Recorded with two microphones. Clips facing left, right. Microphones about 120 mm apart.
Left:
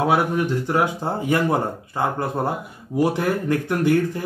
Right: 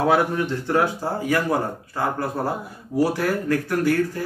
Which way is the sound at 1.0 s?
25° left (ahead or behind).